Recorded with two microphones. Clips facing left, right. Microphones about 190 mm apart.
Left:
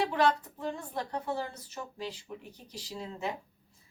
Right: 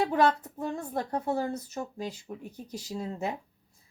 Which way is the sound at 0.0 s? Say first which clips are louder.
Right 3 dB; 45° right (ahead or behind).